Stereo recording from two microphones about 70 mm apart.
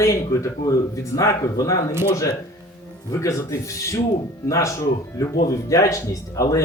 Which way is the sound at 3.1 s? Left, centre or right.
Left.